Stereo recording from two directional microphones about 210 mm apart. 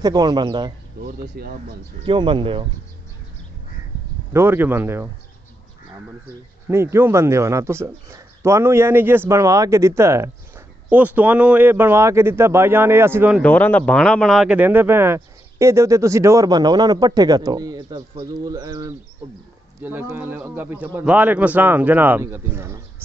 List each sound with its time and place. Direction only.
0.0 s speech: 20° right (ahead or behind)
1.0 s speech: 45° right (ahead or behind)
2.0 s speech: 20° right (ahead or behind)
4.3 s speech: 10° right (ahead or behind)
6.7 s speech: 10° right (ahead or behind)
13.4 s speech: 10° left (ahead or behind); by 22.8 s 10° right (ahead or behind)